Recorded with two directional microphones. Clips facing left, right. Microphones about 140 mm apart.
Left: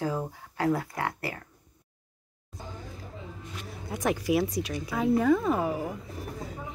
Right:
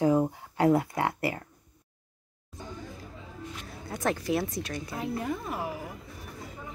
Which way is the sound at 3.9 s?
10° left (ahead or behind).